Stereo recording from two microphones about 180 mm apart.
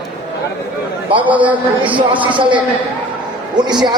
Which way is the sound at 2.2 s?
25° right (ahead or behind).